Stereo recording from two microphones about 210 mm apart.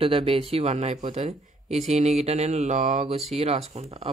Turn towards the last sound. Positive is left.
turn(degrees=-30)  # may be behind; listen again after turning